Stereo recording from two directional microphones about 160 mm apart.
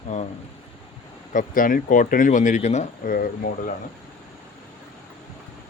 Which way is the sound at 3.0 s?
65° left (ahead or behind).